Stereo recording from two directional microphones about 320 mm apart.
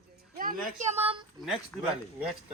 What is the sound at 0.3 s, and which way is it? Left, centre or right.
Speech, right.